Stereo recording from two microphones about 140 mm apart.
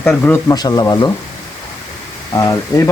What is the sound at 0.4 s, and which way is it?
Speech, 25° left (ahead or behind).